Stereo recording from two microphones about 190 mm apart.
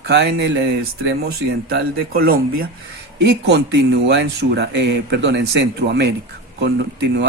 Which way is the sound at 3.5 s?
60° right (ahead or behind).